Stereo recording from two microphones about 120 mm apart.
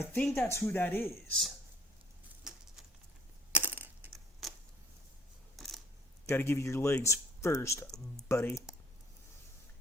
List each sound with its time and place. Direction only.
0.0 s speech: 20° left (ahead or behind)
1.1 s speech: centre (ahead or behind)
2.5 s a sound: 5° right (ahead or behind)
3.5 s coin: 15° right (ahead or behind)
4.4 s a sound: centre (ahead or behind)
6.2 s speech: 20° left (ahead or behind)